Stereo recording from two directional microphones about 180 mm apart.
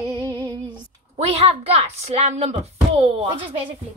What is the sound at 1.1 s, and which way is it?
Speech, 35° right (ahead or behind).